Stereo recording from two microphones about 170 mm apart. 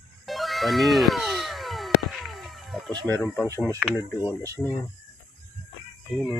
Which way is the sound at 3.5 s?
15° left (ahead or behind).